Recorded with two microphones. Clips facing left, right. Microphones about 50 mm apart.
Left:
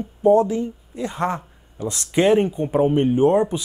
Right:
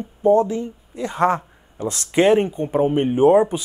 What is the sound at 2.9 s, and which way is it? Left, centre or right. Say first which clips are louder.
Speech: right 4 dB; centre.